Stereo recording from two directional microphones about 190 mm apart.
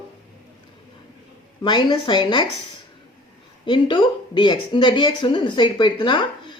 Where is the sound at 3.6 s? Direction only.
25° left (ahead or behind).